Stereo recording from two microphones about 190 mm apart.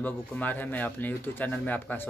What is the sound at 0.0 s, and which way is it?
Speech, 10° left (ahead or behind).